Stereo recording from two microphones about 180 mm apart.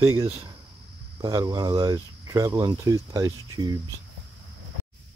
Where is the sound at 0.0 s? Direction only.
20° right (ahead or behind).